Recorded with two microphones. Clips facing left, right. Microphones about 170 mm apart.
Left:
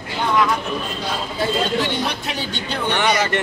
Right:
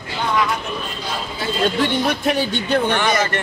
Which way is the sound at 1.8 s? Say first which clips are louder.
Right 3 dB; 50° right (ahead or behind).